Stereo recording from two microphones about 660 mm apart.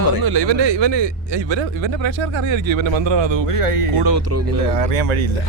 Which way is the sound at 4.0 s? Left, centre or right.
Right.